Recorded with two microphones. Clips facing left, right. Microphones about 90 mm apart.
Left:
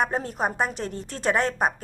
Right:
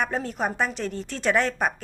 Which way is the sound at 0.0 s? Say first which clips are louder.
Left 1 dB; 35° left (ahead or behind).